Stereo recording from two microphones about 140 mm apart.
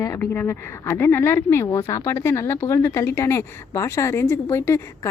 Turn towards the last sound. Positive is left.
turn(degrees=20)  # may be behind; listen again after turning